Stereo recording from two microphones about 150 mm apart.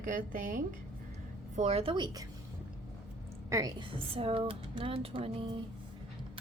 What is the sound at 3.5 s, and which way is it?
Speech, 25° right (ahead or behind).